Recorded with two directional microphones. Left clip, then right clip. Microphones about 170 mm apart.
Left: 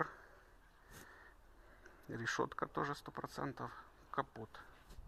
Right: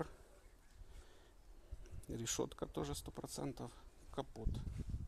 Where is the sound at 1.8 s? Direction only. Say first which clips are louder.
Left 2 dB; 60° right (ahead or behind).